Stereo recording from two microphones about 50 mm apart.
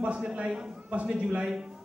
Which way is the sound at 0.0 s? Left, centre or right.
Right.